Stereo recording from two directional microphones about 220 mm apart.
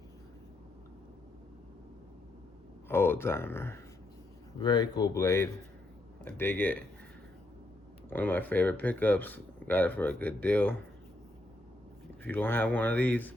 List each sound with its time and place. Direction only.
2.9 s speech: 10° left (ahead or behind)
8.1 s speech: 10° left (ahead or behind)
12.2 s speech: 10° left (ahead or behind)